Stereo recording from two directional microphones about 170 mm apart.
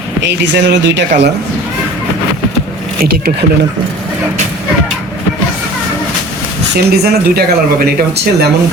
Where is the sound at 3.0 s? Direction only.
65° right (ahead or behind).